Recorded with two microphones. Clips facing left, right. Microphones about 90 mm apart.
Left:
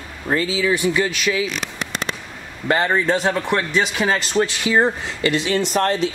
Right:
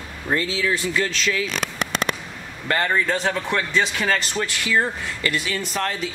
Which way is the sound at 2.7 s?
20° left (ahead or behind).